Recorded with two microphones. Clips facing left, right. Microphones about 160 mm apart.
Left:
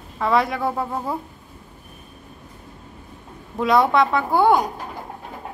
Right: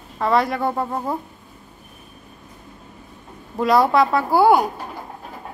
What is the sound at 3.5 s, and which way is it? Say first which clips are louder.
A woman's voice: right 1 dB; centre (ahead or behind).